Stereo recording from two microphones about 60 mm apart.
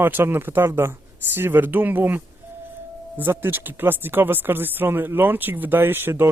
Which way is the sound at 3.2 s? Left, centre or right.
Right.